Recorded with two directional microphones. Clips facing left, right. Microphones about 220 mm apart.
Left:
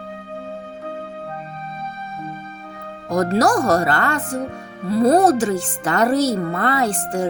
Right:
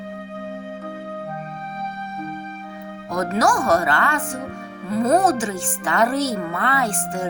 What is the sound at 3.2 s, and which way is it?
Speech, 35° left (ahead or behind).